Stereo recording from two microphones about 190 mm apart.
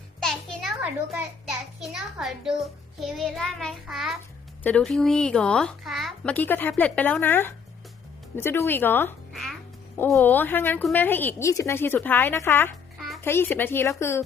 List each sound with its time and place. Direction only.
0.2 s a sound: centre (ahead or behind)
0.8 s a child's voice: 5° right (ahead or behind); by 9.1 s 10° left (ahead or behind)
9.3 s babbling: centre (ahead or behind)
10.2 s speech: 10° left (ahead or behind)